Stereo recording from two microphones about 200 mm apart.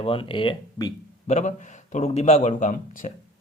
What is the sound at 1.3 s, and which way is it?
Speech, 35° left (ahead or behind).